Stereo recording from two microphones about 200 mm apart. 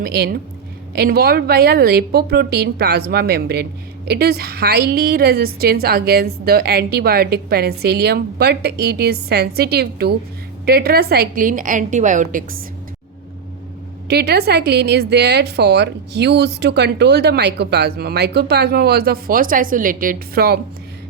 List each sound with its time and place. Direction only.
0.0 s a woman's voice: 50° right (ahead or behind)
14.1 s a woman's voice: 55° right (ahead or behind)